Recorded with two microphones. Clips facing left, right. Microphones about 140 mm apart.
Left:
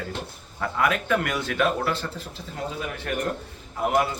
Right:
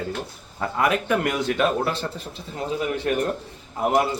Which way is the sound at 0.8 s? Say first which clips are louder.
Right 2 dB; 25° right (ahead or behind).